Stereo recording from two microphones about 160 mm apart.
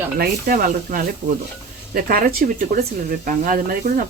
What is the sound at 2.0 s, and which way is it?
Speech, 60° right (ahead or behind).